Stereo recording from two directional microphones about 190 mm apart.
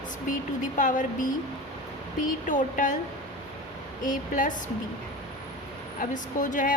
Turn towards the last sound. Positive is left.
turn(degrees=40)  # may be behind; listen again after turning